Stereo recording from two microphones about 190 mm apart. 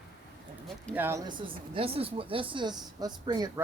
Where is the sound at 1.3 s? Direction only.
25° right (ahead or behind).